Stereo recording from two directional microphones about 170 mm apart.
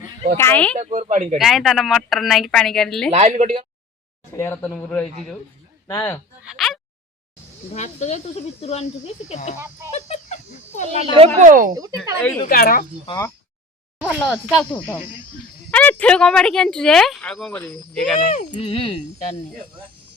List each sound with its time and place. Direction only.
0.3 s speech: 10° left (ahead or behind)
0.8 s speech: 40° right (ahead or behind)
1.4 s speech: centre (ahead or behind)
3.1 s speech: 40° right (ahead or behind)
4.4 s speech: 15° left (ahead or behind)
5.9 s speech: 20° left (ahead or behind)
6.4 s speech: centre (ahead or behind)
7.7 s speech: 40° left (ahead or behind)
9.9 s a sound: 40° left (ahead or behind)
11.3 s speech: 50° right (ahead or behind)
11.7 s speech: 20° right (ahead or behind)
12.5 s speech: 60° left (ahead or behind)
14.0 s speech: 10° left (ahead or behind)
18.3 s speech: 45° left (ahead or behind)